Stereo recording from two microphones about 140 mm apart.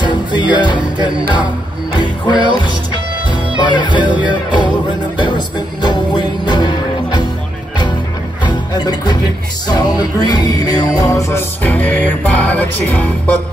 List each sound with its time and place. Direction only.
0.0 s music: 30° left (ahead or behind)
8.5 s music: 30° left (ahead or behind); by 13.1 s 10° left (ahead or behind)